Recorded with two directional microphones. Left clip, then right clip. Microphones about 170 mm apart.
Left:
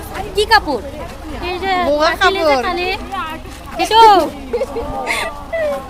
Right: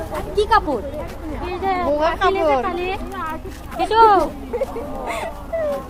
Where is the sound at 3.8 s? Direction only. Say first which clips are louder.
Left 5 dB; 35° left (ahead or behind).